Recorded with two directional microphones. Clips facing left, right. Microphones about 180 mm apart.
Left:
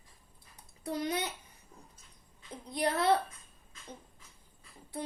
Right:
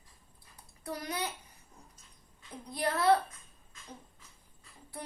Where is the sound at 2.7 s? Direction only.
20° left (ahead or behind).